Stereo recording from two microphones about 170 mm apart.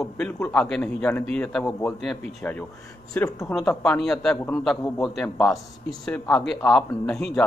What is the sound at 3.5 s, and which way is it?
A man's voice, 5° left (ahead or behind).